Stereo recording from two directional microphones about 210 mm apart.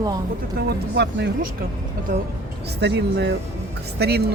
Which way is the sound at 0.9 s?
55° right (ahead or behind).